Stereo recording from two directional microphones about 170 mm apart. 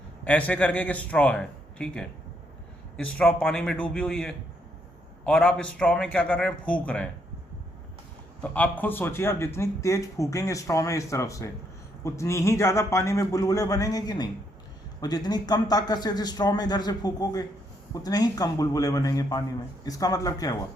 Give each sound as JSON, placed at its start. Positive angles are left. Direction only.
{"t": 0.3, "sound": "a man's voice", "side_deg": 5}
{"t": 8.4, "sound": "a man's voice", "side_deg": 10}